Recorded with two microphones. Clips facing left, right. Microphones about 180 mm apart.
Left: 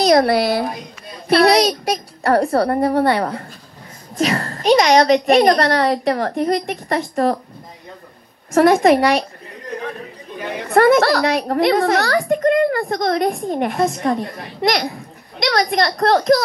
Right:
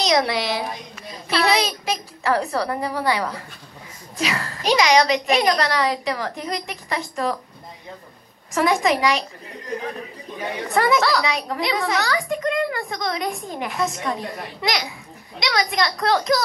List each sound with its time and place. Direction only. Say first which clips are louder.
0.0 s a woman's voice: left 7 dB; 55° left (ahead or behind)
8.5 s a woman's voice: left 8 dB; 60° left (ahead or behind)
10.7 s a woman's voice: left 7 dB; 60° left (ahead or behind)